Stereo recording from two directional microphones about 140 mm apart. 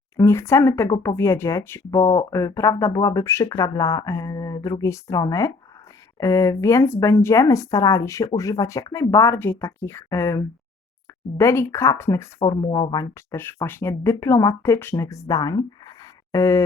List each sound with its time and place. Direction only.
0.2 s speech: 20° left (ahead or behind)
12.5 s speech: 30° left (ahead or behind)
13.3 s speech: 15° left (ahead or behind)